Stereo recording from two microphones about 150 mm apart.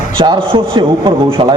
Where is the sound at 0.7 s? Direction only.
35° right (ahead or behind).